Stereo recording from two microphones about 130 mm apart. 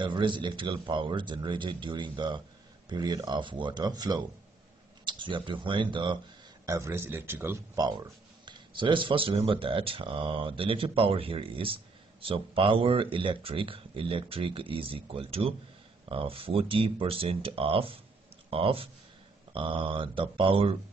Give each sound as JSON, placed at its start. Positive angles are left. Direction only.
{"t": 0.0, "sound": "speech", "side_deg": -35}
{"t": 6.6, "sound": "speech", "side_deg": -25}
{"t": 7.7, "sound": "speech", "side_deg": -30}